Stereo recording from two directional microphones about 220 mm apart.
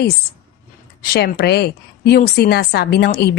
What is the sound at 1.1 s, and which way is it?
A woman's voice, 45° left (ahead or behind).